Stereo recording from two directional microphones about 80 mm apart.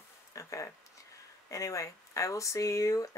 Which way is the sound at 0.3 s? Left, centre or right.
Left.